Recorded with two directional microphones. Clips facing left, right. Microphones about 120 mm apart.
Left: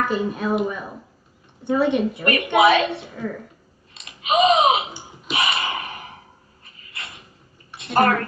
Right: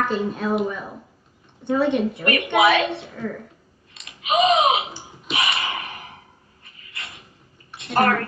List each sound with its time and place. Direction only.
0.0 s speech: 5° left (ahead or behind)
2.6 s a woman's voice: 30° left (ahead or behind)
3.1 s speech: 5° left (ahead or behind)
3.9 s a sound: 30° left (ahead or behind)
5.3 s gasp: 30° left (ahead or behind)
6.6 s a sound: 30° left (ahead or behind)
7.8 s speech: 30° left (ahead or behind)